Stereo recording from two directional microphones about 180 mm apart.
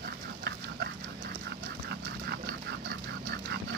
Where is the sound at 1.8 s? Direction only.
65° right (ahead or behind).